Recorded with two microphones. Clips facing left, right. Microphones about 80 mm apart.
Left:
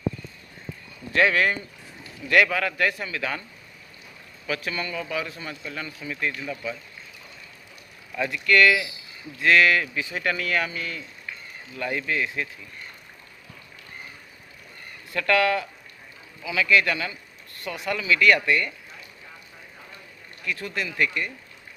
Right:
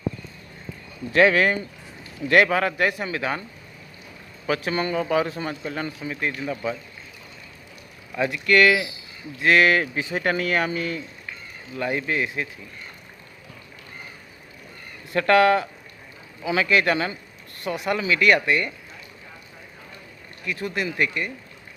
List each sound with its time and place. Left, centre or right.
1.1 s a man's voice: centre
2.3 s a man's voice: right
4.4 s speech: right
6.0 s a man's voice: right
6.5 s speech: right
8.1 s a man's voice: centre
15.1 s a man's voice: right
20.4 s speech: centre